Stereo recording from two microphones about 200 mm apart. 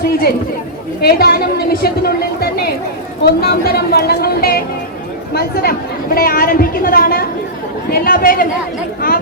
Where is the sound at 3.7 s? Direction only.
50° left (ahead or behind).